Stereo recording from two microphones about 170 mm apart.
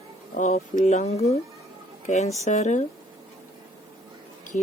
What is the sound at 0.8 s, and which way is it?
Speech, 40° left (ahead or behind).